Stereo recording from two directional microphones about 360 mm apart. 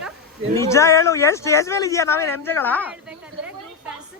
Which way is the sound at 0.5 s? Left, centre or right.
Centre.